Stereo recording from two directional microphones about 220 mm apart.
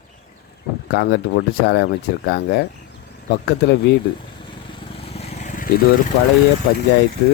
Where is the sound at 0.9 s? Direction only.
50° left (ahead or behind).